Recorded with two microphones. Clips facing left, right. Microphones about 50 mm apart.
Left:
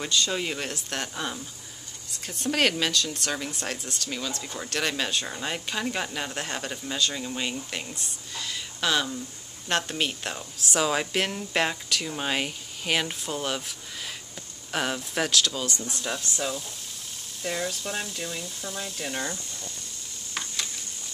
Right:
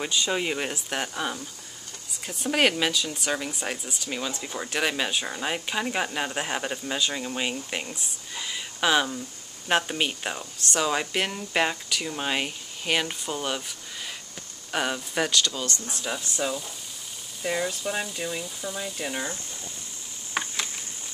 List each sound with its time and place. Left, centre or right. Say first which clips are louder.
0.0 s speech: right 1 dB; centre
10.7 s speech: even; centre
20.3 s a sound: right 4 dB; right